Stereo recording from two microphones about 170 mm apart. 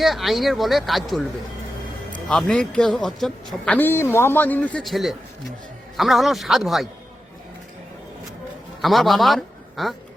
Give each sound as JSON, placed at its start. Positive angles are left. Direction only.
{"t": 0.0, "sound": "speech", "side_deg": 0}
{"t": 8.8, "sound": "a man's voice", "side_deg": 0}